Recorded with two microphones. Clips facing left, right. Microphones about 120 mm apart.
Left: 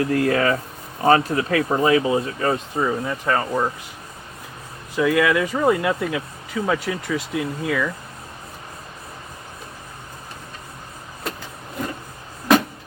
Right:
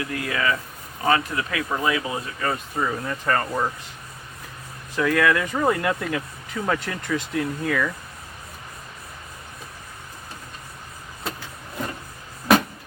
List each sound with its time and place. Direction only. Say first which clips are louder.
0.0 s speech: left 7 dB; 40° left (ahead or behind); by 3.7 s 10° left (ahead or behind)
4.9 s speech: left 2 dB; 10° left (ahead or behind)